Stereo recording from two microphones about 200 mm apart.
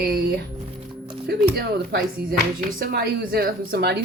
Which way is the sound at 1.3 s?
50° right (ahead or behind).